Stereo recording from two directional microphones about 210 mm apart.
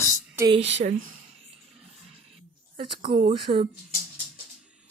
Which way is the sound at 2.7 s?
25° right (ahead or behind).